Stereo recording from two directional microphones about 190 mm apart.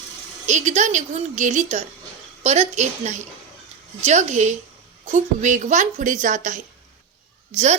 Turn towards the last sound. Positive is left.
turn(degrees=-35)  # may be behind; listen again after turning